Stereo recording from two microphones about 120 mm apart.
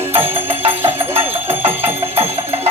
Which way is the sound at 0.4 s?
55° right (ahead or behind).